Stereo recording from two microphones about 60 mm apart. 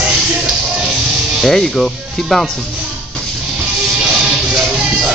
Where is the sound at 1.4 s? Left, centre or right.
Centre.